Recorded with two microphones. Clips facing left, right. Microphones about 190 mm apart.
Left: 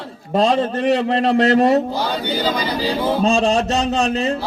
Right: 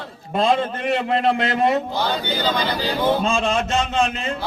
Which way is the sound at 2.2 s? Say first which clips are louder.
Left 2 dB; 10° left (ahead or behind).